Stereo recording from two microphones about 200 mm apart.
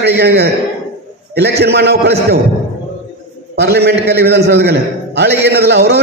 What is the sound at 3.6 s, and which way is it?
A man's voice, 55° right (ahead or behind).